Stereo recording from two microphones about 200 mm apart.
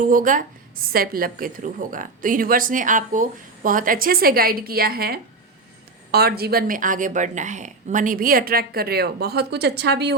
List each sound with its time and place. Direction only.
0.0 s a woman's voice: 40° right (ahead or behind)